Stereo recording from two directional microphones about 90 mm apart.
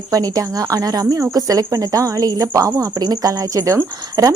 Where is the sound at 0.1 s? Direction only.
40° right (ahead or behind).